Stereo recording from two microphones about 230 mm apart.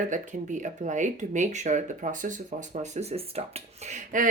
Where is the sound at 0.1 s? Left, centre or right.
Right.